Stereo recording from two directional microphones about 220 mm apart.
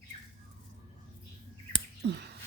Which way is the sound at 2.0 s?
50° right (ahead or behind).